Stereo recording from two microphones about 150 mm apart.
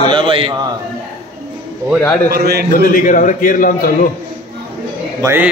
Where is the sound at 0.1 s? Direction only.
35° right (ahead or behind).